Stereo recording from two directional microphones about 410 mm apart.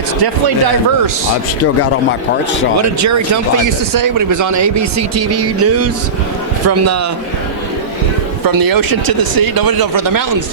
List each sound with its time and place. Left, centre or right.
3.9 s speech: right
8.4 s speech: right